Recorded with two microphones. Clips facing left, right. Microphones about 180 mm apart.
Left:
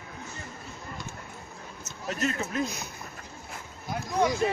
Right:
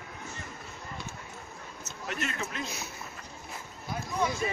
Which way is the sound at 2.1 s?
35° left (ahead or behind).